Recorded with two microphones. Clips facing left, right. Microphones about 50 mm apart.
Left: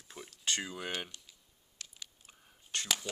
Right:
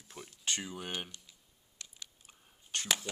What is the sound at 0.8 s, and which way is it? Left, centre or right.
Speech, left.